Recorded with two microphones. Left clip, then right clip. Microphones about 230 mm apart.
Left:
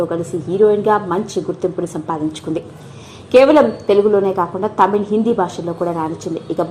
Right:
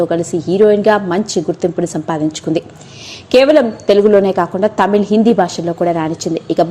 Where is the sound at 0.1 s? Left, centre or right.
Right.